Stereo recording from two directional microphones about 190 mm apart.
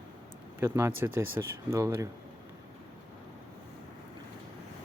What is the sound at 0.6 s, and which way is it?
Speech, 10° right (ahead or behind).